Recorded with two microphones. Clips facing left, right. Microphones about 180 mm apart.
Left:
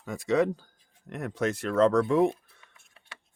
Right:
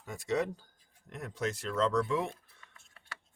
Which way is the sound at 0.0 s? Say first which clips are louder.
Left 7 dB; 90° left.